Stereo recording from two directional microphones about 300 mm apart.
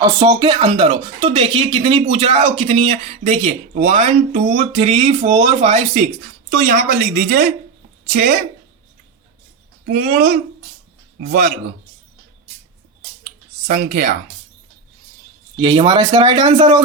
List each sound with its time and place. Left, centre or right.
0.0 s speech: centre
9.8 s speech: right
13.7 s speech: right
15.5 s speech: centre